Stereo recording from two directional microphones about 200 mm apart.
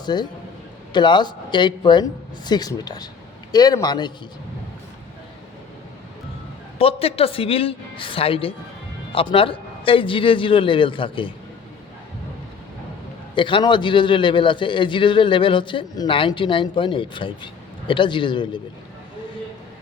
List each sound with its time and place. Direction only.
0.0 s a man's voice: 20° left (ahead or behind)
6.7 s a man's voice: 30° left (ahead or behind)
13.3 s a man's voice: 25° left (ahead or behind)